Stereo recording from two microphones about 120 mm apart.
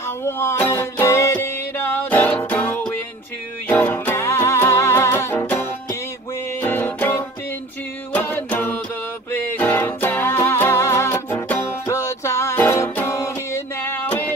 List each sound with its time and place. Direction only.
0.2 s music: 20° left (ahead or behind)
6.6 s music: 15° left (ahead or behind)